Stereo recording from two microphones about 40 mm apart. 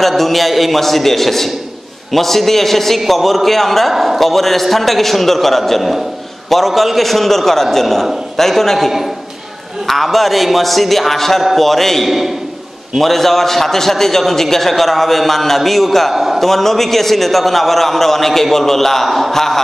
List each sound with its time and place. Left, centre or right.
0.0 s a man's voice: centre